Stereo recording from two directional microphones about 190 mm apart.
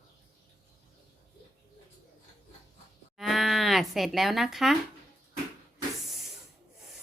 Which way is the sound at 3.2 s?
Centre (ahead or behind).